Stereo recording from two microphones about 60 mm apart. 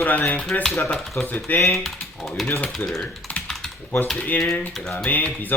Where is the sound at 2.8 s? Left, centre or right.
Left.